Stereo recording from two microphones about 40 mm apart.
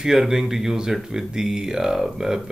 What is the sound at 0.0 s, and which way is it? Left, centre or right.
Speech, centre.